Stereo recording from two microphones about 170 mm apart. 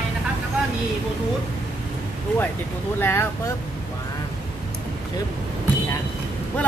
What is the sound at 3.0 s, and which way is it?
Speech, 15° left (ahead or behind).